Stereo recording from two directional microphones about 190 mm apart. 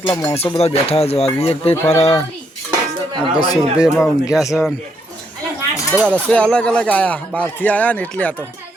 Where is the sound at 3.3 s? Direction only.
20° left (ahead or behind).